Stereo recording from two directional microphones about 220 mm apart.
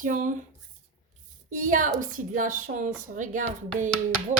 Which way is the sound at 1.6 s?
35° right (ahead or behind).